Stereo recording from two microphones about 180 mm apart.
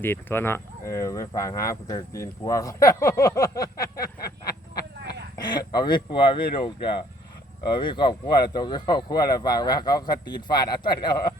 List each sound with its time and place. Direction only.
0.0 s speech: 10° left (ahead or behind)